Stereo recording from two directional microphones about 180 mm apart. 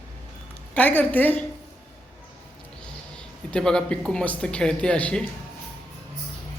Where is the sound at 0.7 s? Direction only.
10° left (ahead or behind).